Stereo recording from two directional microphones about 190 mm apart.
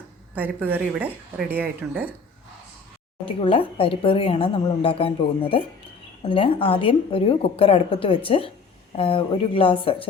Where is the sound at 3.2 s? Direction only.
30° left (ahead or behind).